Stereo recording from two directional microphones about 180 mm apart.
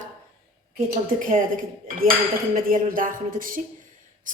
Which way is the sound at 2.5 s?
50° right (ahead or behind).